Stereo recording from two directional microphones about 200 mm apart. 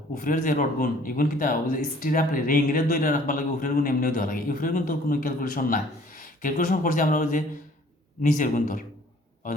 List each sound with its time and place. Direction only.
0.2 s speech: 45° left (ahead or behind)